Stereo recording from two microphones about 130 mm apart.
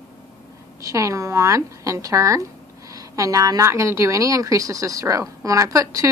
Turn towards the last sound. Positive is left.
turn(degrees=-25)  # may be behind; listen again after turning